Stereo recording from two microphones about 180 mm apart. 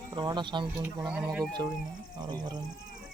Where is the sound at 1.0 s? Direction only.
5° right (ahead or behind).